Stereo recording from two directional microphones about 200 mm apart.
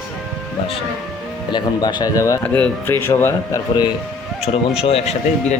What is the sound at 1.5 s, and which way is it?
Speech, 20° left (ahead or behind).